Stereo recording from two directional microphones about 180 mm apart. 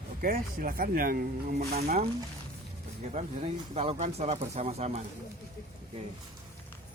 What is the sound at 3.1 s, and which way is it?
Speech, 40° right (ahead or behind).